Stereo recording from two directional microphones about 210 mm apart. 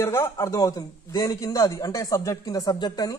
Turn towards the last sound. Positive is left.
turn(degrees=20)  # may be behind; listen again after turning